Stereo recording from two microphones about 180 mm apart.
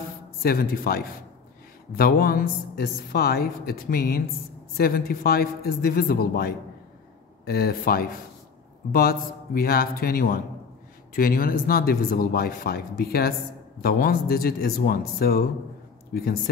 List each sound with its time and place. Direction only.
0.4 s a woman's voice: 55° left (ahead or behind)